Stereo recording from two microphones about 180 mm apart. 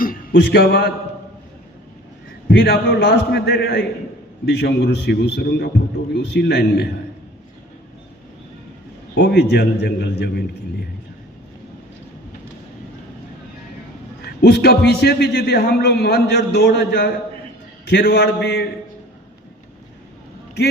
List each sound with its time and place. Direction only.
0.0 s a man's voice: 55° left (ahead or behind)
2.5 s a man's voice: 65° left (ahead or behind)
9.1 s a man's voice: 65° left (ahead or behind)
14.3 s a man's voice: 65° left (ahead or behind)